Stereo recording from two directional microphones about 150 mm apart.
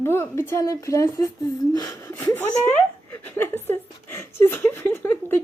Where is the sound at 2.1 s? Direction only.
15° left (ahead or behind).